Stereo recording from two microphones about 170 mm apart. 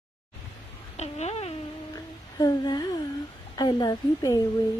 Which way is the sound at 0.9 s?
40° left (ahead or behind).